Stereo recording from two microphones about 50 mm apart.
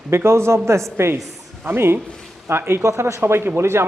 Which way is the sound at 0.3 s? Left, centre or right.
Right.